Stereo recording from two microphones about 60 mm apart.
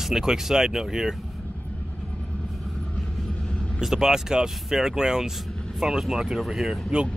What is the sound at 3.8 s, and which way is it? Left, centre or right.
Speech, centre.